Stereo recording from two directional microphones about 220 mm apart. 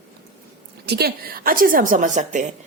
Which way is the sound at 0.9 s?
45° right (ahead or behind).